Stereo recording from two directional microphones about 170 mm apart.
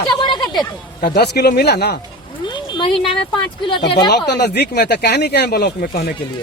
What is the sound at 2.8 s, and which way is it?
Speech, 30° left (ahead or behind).